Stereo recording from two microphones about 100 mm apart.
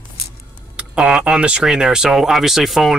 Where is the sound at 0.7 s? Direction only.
10° right (ahead or behind).